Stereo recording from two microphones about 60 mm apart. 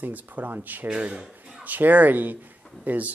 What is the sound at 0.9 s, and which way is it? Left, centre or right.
Speech, right.